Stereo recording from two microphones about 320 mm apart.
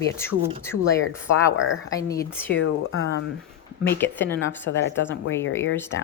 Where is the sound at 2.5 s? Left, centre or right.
Left.